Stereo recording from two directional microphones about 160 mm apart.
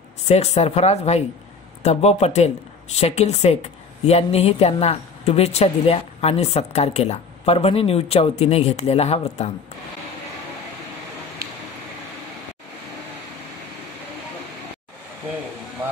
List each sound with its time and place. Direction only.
0.3 s a woman's voice: 40° left (ahead or behind)